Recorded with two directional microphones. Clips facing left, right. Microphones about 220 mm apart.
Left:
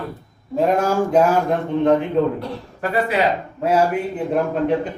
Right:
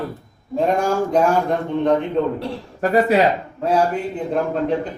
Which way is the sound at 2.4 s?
40° right (ahead or behind).